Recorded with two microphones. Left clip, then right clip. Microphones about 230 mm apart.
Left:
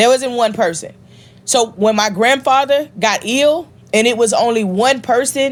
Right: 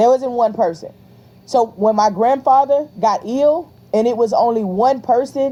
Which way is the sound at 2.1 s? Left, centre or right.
Left.